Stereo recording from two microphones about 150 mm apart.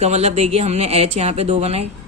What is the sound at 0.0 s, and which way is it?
Speech, 45° right (ahead or behind).